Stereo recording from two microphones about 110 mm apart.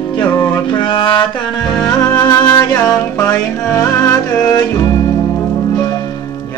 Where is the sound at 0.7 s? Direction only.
50° left (ahead or behind).